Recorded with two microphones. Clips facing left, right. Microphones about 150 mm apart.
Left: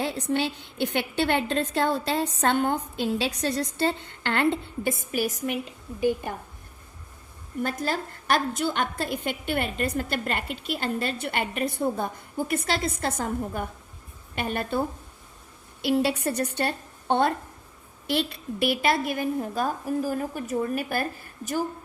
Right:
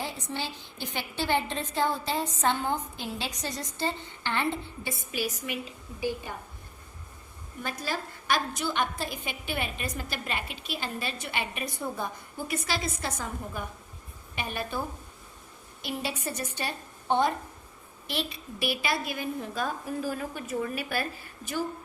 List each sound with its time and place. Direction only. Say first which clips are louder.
0.0 s a woman's voice: left 8 dB; 65° left (ahead or behind)
7.6 s a woman's voice: left 6 dB; 55° left (ahead or behind)
15.8 s a woman's voice: left 10 dB; 70° left (ahead or behind); by 21.6 s 45° left (ahead or behind)